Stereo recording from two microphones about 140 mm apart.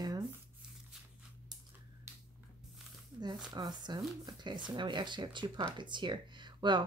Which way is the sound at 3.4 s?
30° right (ahead or behind).